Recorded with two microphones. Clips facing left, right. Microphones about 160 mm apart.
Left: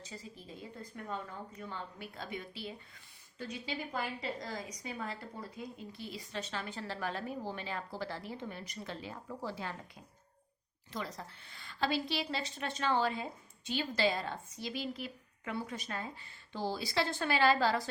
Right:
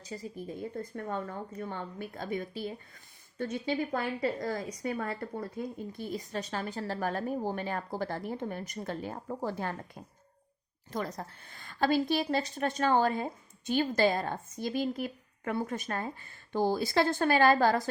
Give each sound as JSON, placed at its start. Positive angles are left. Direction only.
{"t": 0.0, "sound": "a woman's voice", "side_deg": -40}